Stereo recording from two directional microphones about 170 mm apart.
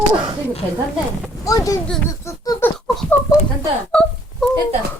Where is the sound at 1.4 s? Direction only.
20° left (ahead or behind).